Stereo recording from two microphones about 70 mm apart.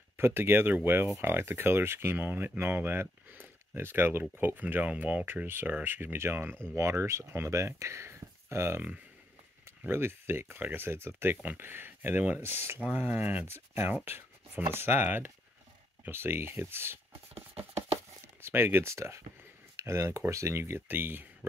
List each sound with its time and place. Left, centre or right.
0.2 s speech: right